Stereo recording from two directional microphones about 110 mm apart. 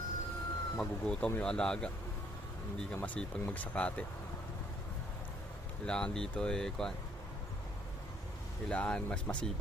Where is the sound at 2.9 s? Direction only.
15° left (ahead or behind).